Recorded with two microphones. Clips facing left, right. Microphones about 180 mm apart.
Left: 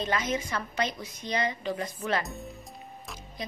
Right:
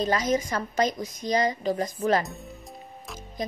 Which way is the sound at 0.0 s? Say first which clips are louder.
Right 5 dB; 40° right (ahead or behind).